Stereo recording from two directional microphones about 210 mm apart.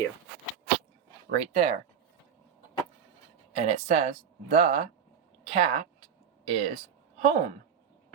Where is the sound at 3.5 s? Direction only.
30° right (ahead or behind).